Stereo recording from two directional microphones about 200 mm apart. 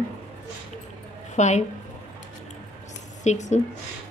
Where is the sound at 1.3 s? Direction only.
35° left (ahead or behind).